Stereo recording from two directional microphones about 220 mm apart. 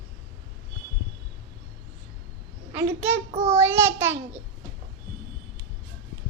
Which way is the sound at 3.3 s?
30° right (ahead or behind).